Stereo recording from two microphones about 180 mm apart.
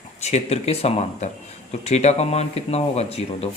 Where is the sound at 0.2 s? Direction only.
35° left (ahead or behind).